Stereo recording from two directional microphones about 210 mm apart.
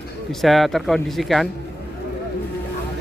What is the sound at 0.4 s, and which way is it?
Speech, centre (ahead or behind).